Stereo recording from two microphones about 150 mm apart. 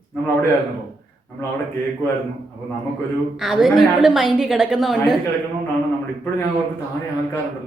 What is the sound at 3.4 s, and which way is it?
A woman's voice, 5° right (ahead or behind).